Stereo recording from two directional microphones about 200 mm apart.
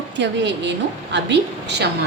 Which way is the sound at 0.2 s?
60° right (ahead or behind).